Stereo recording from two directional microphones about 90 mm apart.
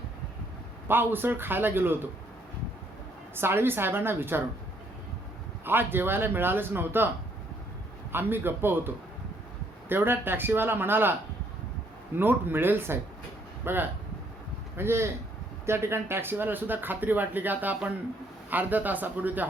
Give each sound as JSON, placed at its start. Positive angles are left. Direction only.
{"t": 0.9, "sound": "speech", "side_deg": -25}
{"t": 3.3, "sound": "speech", "side_deg": -25}
{"t": 5.6, "sound": "speech", "side_deg": -25}
{"t": 8.1, "sound": "speech", "side_deg": -25}
{"t": 9.9, "sound": "speech", "side_deg": -25}
{"t": 12.1, "sound": "speech", "side_deg": -25}